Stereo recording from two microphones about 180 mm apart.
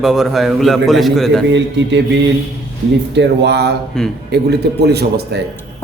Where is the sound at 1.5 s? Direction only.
80° right.